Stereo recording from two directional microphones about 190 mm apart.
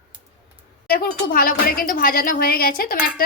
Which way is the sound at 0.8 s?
50° left (ahead or behind).